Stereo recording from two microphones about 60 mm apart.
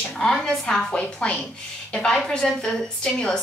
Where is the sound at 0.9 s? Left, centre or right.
Left.